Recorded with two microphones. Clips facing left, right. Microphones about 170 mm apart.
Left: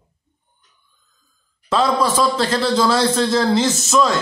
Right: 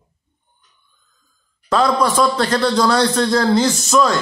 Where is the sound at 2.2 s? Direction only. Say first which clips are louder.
Right 2 dB; 25° left (ahead or behind).